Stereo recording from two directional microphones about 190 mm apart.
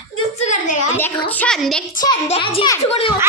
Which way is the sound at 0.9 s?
5° left (ahead or behind).